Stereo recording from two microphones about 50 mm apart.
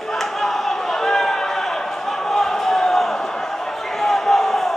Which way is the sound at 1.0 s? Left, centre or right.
Centre.